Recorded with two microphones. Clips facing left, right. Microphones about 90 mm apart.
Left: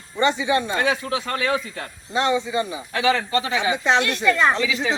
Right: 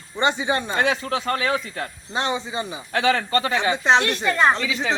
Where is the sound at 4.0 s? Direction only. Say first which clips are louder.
Left 2 dB; 25° right (ahead or behind).